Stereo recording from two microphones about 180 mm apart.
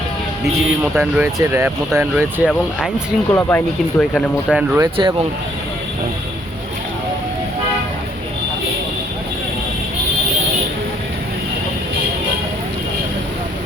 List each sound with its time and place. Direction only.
0.9 s speech: 5° right (ahead or behind)
2.1 s speech: centre (ahead or behind)
3.3 s speech: 10° left (ahead or behind)
4.8 s speech: 25° right (ahead or behind)